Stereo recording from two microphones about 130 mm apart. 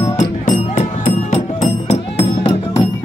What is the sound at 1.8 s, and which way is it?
Music, 60° left (ahead or behind).